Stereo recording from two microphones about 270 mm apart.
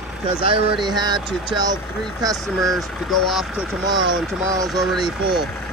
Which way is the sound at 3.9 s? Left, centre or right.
Centre.